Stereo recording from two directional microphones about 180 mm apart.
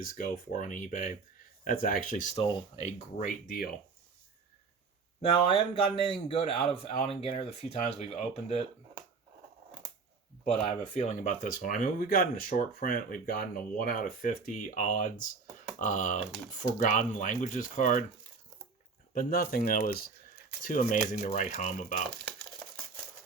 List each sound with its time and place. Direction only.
0.0 s speech: 50° left (ahead or behind)
5.3 s speech: 30° left (ahead or behind)
10.5 s speech: 35° left (ahead or behind)
19.1 s speech: 55° left (ahead or behind)